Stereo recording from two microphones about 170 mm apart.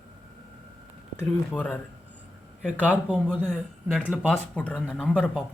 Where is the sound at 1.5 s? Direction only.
10° left (ahead or behind).